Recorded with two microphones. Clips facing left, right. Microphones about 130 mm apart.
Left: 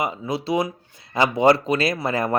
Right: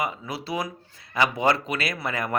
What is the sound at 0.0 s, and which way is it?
Speech, 25° left (ahead or behind).